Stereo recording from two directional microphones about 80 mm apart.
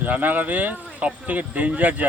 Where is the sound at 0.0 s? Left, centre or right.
Right.